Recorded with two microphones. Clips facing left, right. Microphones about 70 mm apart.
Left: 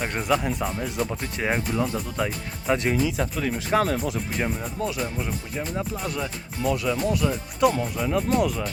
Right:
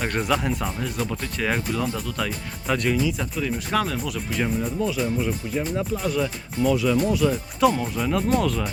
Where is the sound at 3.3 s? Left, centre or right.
Left.